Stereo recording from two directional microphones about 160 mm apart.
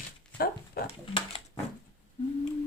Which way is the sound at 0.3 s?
75° left (ahead or behind).